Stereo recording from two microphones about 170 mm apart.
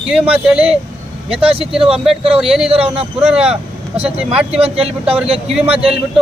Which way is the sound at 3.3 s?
5° right (ahead or behind).